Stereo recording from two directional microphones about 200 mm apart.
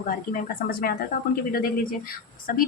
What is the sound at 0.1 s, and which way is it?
Speech, 45° left (ahead or behind).